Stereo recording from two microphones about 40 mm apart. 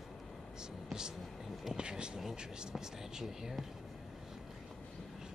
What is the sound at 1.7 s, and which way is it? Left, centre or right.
Speech, right.